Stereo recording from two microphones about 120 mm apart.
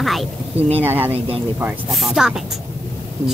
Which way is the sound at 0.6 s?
60° right (ahead or behind).